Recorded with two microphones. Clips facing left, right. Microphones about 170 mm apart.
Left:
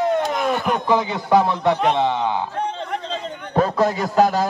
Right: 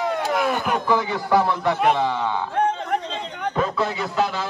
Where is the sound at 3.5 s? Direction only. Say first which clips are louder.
Left 6 dB; 40° left (ahead or behind).